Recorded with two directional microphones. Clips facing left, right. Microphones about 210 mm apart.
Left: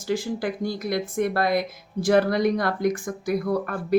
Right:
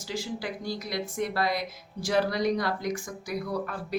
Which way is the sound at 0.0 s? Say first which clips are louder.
Left 8 dB; 55° left (ahead or behind).